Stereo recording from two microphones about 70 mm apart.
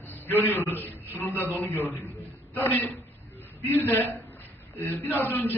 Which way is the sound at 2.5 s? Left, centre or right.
Left.